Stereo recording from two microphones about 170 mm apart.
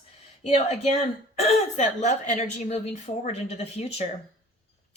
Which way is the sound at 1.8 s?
45° left (ahead or behind).